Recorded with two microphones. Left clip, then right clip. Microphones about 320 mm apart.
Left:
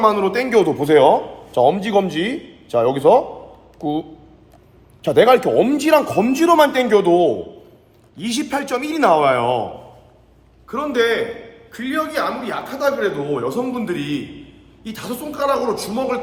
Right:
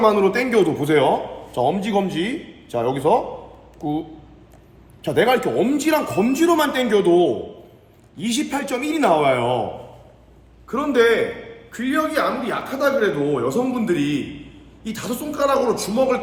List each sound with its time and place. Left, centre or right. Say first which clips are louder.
0.0 s a man's voice: left 1 dB; centre
5.0 s a man's voice: left 5 dB; left
10.7 s a man's voice: right 1 dB; centre